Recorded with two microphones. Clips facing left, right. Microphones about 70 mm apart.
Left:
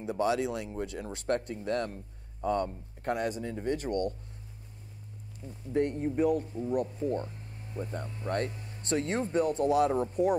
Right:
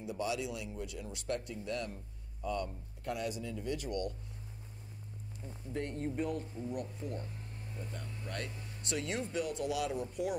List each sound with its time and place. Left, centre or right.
0.0 s speech: left
5.4 s speech: centre
5.9 s a man's voice: centre
6.7 s speech: left
7.8 s a man's voice: left